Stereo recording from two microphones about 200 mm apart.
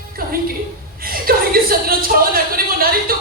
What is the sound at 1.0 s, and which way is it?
Chuckle, 45° right (ahead or behind).